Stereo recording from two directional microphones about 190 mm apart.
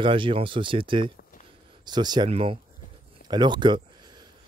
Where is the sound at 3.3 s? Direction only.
25° right (ahead or behind).